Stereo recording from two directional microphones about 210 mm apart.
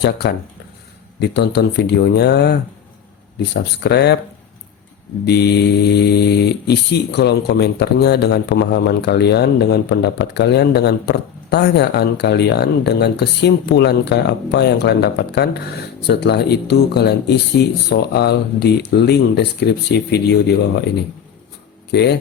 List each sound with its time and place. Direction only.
0.0 s speech: 50° left (ahead or behind)
5.2 s speech: 50° left (ahead or behind)
21.9 s speech: 50° left (ahead or behind)